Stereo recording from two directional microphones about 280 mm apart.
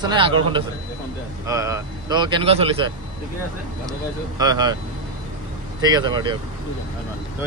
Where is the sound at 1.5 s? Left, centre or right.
Centre.